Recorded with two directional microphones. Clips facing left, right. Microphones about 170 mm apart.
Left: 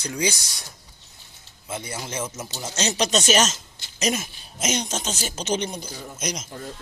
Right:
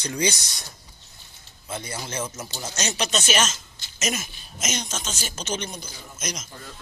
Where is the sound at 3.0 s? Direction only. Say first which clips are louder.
Left 4 dB; 40° left (ahead or behind).